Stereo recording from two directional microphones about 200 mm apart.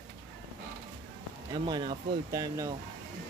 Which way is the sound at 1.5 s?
20° right (ahead or behind).